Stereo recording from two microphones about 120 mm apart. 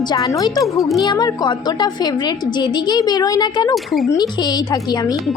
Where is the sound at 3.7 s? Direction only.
Centre (ahead or behind).